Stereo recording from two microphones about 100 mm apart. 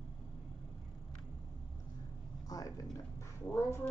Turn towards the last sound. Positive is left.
turn(degrees=25)  # may be behind; listen again after turning